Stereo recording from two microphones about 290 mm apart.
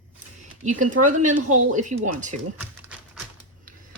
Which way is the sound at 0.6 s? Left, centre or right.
Right.